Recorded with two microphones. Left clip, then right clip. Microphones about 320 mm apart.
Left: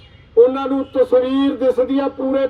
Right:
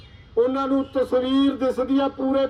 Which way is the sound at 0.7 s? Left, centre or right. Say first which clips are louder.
Left 6 dB; centre.